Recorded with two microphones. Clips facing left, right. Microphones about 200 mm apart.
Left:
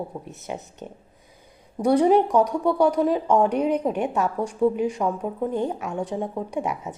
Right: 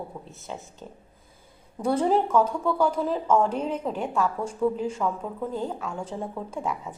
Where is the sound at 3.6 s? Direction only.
15° left (ahead or behind).